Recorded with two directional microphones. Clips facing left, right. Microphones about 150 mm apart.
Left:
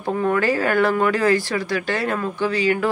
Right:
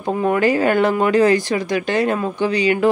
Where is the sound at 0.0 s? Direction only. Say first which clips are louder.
Right 3 dB; 15° right (ahead or behind).